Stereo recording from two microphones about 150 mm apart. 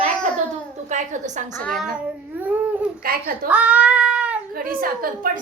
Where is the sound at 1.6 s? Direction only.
Centre (ahead or behind).